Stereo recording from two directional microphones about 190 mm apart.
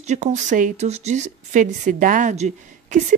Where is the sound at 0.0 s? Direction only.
40° right (ahead or behind).